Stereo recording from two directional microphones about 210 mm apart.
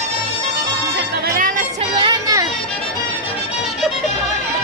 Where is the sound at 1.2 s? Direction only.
40° right (ahead or behind).